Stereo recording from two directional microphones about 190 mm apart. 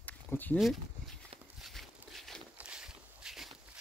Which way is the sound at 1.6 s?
Centre (ahead or behind).